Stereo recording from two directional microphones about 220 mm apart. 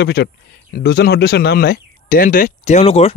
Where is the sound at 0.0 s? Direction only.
50° left (ahead or behind).